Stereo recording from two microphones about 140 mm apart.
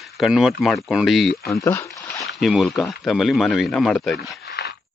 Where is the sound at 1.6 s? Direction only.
20° left (ahead or behind).